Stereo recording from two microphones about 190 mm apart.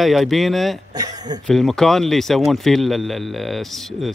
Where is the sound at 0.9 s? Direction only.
20° right (ahead or behind).